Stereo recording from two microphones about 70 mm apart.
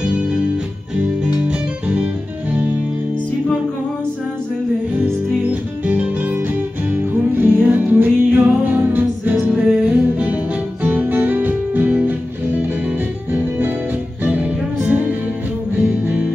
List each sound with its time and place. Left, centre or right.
5.5 s music: right